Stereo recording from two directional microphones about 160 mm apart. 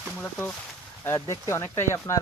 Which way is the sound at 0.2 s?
10° left (ahead or behind).